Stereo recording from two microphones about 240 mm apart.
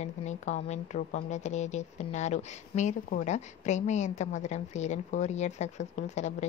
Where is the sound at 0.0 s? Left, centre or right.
Left.